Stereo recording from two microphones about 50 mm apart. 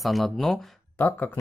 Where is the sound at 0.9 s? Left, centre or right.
Left.